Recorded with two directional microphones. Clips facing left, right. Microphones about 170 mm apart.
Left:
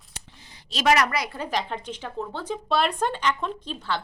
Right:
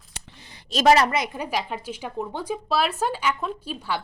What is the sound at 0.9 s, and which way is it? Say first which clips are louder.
Speech: right 2 dB; 25° right (ahead or behind).